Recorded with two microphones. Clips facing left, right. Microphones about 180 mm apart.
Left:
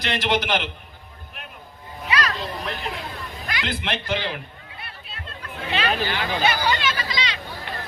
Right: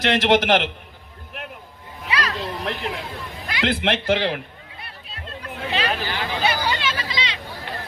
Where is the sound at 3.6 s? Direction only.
80° right.